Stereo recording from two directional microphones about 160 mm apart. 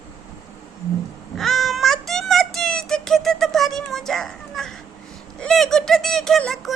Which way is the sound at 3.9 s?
Centre (ahead or behind).